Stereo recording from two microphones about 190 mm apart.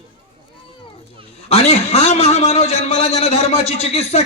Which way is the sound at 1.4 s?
35° left (ahead or behind).